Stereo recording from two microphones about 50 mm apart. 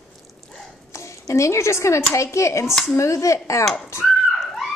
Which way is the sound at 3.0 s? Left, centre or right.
Left.